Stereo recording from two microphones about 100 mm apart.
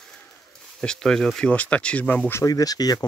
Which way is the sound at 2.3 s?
35° left (ahead or behind).